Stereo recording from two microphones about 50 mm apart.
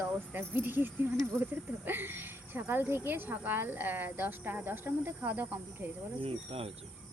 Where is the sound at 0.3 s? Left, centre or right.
Right.